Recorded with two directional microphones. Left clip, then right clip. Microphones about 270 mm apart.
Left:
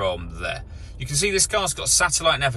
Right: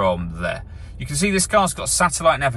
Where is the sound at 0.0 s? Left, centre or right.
Centre.